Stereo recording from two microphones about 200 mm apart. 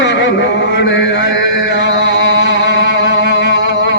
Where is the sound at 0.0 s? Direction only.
60° left (ahead or behind).